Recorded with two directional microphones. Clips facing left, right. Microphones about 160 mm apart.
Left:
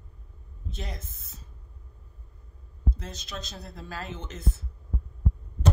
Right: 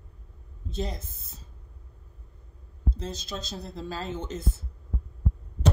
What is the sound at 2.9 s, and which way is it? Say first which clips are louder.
A woman's voice: right 4 dB; 30° right (ahead or behind).